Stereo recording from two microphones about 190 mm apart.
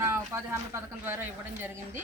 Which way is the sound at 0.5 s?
15° right (ahead or behind).